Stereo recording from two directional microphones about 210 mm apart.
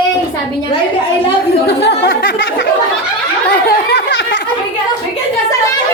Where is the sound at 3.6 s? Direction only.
50° left (ahead or behind).